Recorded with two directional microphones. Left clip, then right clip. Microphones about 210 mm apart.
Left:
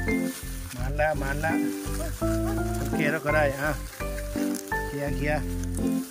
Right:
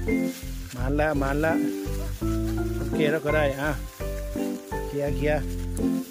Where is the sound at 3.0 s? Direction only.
20° right (ahead or behind).